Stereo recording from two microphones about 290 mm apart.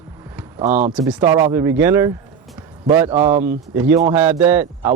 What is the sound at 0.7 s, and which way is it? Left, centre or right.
Speech, right.